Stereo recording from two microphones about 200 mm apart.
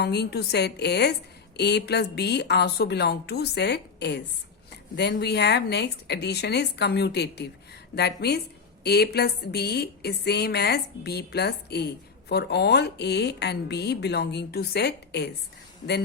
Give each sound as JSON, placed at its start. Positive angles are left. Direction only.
{"t": 0.0, "sound": "a woman's voice", "side_deg": 55}